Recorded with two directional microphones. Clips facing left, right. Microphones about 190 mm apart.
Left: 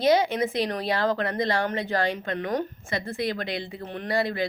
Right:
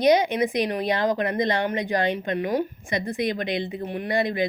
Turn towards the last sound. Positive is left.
turn(degrees=-20)  # may be behind; listen again after turning